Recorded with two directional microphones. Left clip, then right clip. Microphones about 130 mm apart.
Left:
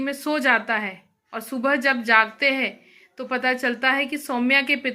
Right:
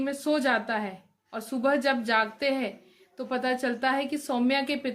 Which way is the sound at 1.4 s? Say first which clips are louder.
Left 3 dB; 20° right (ahead or behind).